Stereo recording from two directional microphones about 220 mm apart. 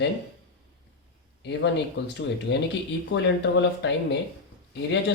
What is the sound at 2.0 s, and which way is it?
Speech, 50° left (ahead or behind).